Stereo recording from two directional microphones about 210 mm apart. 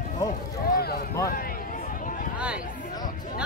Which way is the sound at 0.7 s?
45° left (ahead or behind).